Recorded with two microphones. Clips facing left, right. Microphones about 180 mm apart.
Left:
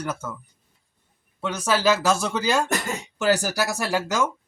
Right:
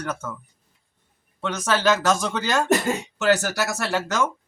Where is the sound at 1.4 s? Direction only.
10° left (ahead or behind).